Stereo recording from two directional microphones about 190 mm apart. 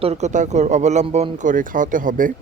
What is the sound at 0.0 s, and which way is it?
Speech, 35° right (ahead or behind).